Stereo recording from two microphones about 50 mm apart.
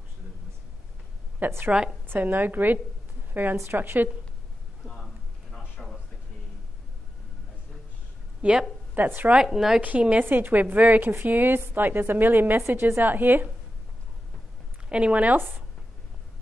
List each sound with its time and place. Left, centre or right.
1.4 s a woman's voice: right
5.8 s a sound: centre
8.4 s a woman's voice: right
8.9 s a woman's voice: right
9.3 s a woman's voice: centre
9.8 s a woman's voice: right
10.2 s a woman's voice: right
14.9 s a woman's voice: right